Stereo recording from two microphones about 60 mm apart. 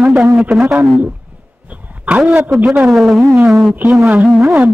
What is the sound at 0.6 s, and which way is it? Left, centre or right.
Speech, right.